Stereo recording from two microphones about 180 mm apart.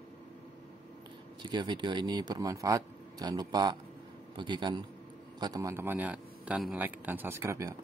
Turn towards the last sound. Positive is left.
turn(degrees=-15)  # may be behind; listen again after turning